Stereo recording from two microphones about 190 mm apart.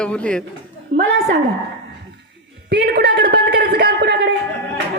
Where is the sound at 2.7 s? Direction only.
65° right (ahead or behind).